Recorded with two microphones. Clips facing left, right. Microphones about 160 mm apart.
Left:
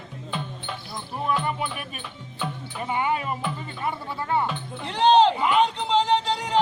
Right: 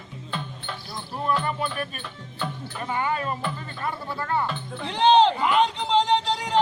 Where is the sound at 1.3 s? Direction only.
15° left (ahead or behind).